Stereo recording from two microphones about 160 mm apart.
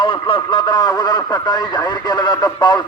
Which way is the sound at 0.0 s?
30° left (ahead or behind).